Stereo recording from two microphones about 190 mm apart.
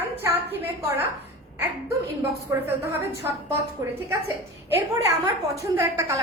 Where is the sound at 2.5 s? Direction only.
15° right (ahead or behind).